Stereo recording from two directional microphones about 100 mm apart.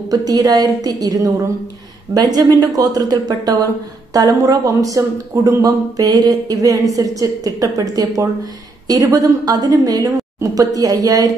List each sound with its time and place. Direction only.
0.3 s speech: 40° right (ahead or behind)